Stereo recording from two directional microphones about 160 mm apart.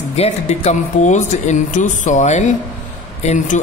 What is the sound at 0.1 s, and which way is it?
A man's voice, 45° left (ahead or behind).